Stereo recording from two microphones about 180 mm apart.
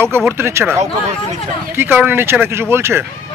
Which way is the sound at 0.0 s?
15° right (ahead or behind).